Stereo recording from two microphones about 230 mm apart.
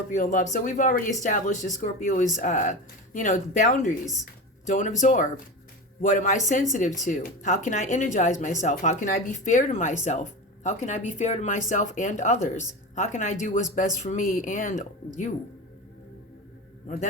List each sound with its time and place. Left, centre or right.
0.1 s speech: left